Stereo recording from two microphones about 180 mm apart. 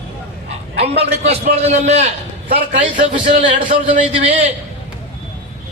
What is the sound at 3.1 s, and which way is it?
A man's voice, 35° right (ahead or behind).